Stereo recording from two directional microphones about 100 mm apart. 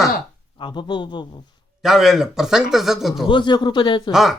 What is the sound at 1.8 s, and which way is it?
Speech, 5° right (ahead or behind).